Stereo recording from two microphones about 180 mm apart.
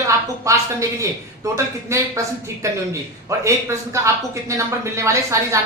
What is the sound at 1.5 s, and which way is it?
A man's voice, 15° right (ahead or behind).